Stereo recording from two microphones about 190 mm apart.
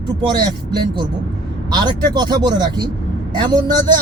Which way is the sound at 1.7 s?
20° right (ahead or behind).